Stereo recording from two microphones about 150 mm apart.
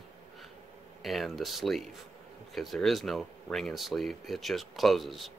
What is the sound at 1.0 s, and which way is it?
Speech, centre (ahead or behind).